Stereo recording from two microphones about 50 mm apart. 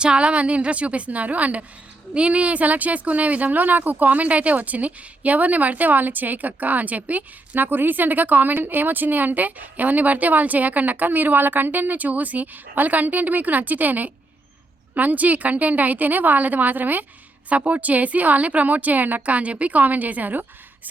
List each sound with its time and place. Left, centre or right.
0.0 s a woman's voice: right